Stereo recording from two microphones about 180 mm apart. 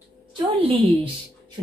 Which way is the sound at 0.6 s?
30° right (ahead or behind).